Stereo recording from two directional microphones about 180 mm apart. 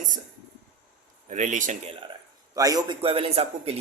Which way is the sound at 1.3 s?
40° right (ahead or behind).